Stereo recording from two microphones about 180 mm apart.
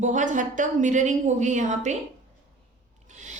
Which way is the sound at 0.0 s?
45° right (ahead or behind).